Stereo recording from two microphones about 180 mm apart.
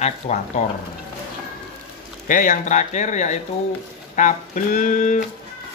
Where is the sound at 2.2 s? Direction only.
50° left (ahead or behind).